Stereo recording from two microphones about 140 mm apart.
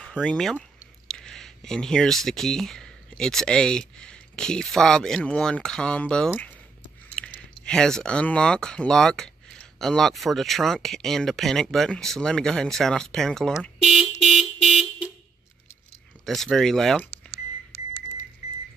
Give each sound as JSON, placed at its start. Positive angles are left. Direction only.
{"t": 0.2, "sound": "speech", "side_deg": 5}
{"t": 14.2, "sound": "vehicle", "side_deg": 0}
{"t": 16.3, "sound": "speech", "side_deg": 5}